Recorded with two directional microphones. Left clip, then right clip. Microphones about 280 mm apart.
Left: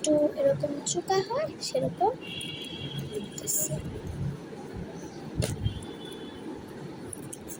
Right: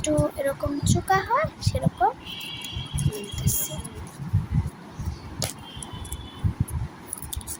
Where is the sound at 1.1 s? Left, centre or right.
Right.